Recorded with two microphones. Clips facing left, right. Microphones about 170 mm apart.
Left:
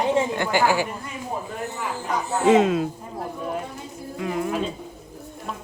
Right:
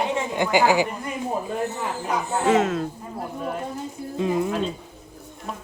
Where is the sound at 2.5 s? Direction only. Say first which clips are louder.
Left 4 dB; 15° left (ahead or behind).